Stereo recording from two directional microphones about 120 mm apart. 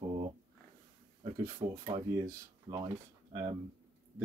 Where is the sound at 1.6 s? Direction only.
60° right (ahead or behind).